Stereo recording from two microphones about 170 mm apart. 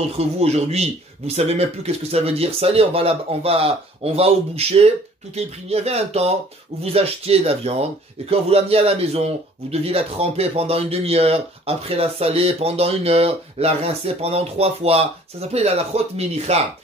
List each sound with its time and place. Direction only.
0.2 s speech: 40° right (ahead or behind)